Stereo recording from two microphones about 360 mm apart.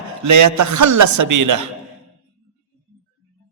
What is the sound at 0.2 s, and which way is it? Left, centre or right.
A man's voice, right.